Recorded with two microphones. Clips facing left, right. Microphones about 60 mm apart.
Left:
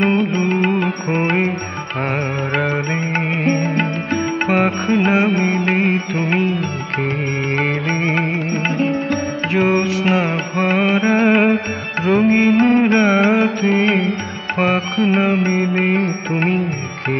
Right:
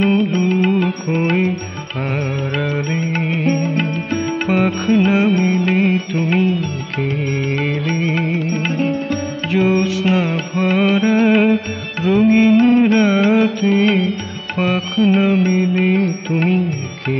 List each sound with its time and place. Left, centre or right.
0.0 s music: left
3.5 s music: left
4.5 s music: left
10.8 s carnatic music: left
12.0 s music: left
12.4 s mantra: left
12.6 s music: left